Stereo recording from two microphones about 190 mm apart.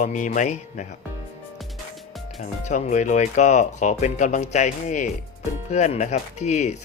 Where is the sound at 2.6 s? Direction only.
40° left (ahead or behind).